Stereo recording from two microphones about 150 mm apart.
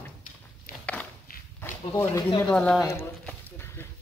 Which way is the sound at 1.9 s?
15° left (ahead or behind).